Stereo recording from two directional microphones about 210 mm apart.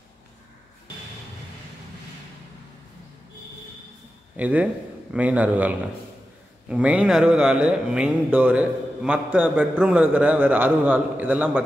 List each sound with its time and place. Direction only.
4.4 s speech: 5° right (ahead or behind)